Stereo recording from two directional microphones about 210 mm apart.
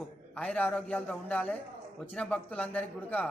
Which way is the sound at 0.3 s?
5° left (ahead or behind).